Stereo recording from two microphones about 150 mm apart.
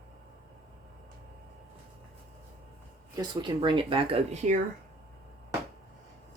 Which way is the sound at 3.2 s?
30° right (ahead or behind).